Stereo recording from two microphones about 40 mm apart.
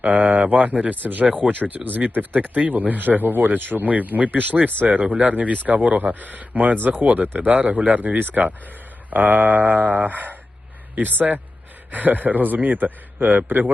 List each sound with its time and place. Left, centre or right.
0.0 s speech: right